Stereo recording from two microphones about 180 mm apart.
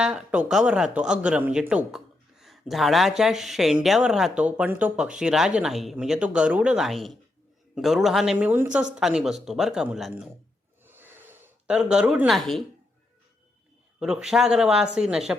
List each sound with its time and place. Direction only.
0.0 s a woman's voice: 5° right (ahead or behind)
10.8 s gasp: 10° right (ahead or behind)
14.0 s a woman's voice: 5° right (ahead or behind)